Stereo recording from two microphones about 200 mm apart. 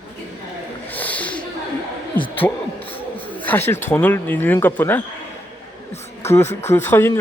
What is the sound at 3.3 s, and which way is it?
Speech, 10° left (ahead or behind).